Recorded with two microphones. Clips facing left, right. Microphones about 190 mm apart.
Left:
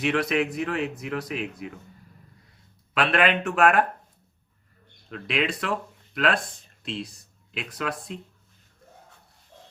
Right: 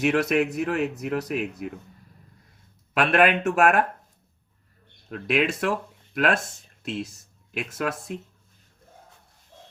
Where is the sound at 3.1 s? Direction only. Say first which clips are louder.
Right 4 dB; 50° right (ahead or behind).